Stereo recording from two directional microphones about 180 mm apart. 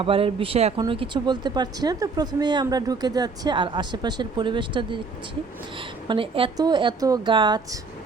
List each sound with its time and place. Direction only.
0.0 s a woman's voice: 30° right (ahead or behind)
6.1 s a woman's voice: 30° right (ahead or behind)